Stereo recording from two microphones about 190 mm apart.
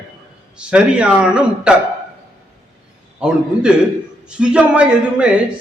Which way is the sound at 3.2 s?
5° right (ahead or behind).